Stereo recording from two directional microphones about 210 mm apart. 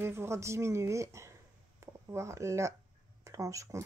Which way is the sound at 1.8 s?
15° right (ahead or behind).